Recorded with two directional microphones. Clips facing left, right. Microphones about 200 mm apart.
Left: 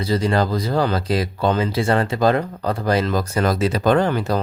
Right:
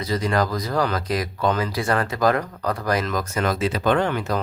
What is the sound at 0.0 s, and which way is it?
Speech, 30° left (ahead or behind).